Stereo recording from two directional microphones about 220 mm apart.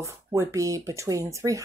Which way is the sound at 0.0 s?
15° right (ahead or behind).